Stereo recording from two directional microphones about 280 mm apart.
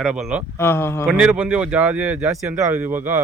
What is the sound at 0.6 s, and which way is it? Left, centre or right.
Speech, centre.